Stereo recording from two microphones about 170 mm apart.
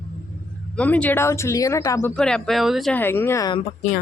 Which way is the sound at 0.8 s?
10° left (ahead or behind).